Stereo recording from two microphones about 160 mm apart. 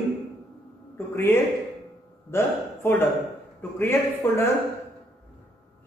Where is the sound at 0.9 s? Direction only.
15° left (ahead or behind).